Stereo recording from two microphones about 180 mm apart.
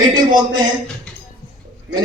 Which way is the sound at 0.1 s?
25° right (ahead or behind).